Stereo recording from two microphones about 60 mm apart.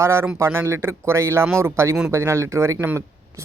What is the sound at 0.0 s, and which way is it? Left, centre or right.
Speech, right.